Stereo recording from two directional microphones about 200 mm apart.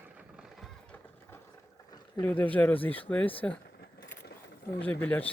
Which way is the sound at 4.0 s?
50° left (ahead or behind).